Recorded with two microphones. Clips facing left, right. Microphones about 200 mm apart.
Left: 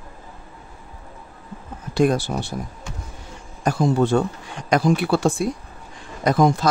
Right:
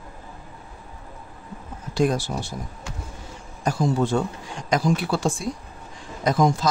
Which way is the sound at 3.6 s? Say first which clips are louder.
Left 3 dB; 60° left (ahead or behind).